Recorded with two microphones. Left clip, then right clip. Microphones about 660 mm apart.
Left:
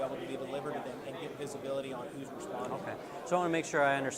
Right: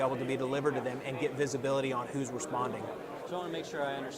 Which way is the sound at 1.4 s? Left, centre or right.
Right.